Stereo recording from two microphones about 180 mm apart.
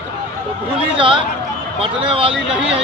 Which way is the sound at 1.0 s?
30° right (ahead or behind).